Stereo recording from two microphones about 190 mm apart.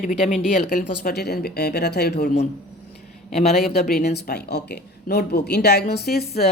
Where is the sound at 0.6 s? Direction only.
55° left (ahead or behind).